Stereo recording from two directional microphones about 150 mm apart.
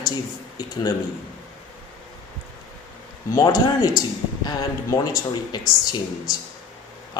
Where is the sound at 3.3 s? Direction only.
25° left (ahead or behind).